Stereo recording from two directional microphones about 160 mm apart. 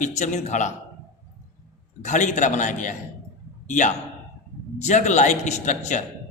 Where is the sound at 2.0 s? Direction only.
50° left (ahead or behind).